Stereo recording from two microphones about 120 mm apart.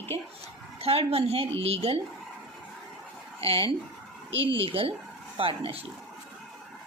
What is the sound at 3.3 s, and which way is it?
Speech, 50° right (ahead or behind).